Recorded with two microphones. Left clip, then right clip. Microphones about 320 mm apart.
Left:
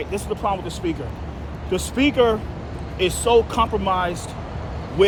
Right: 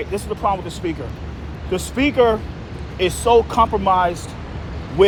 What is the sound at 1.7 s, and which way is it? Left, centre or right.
Speech, centre.